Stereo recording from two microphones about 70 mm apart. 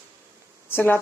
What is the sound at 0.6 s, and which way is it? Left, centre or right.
Speech, left.